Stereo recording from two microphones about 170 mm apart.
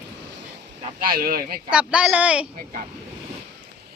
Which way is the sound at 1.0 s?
60° right (ahead or behind).